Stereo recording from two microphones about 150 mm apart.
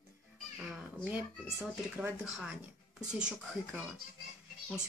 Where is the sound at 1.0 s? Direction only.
10° right (ahead or behind).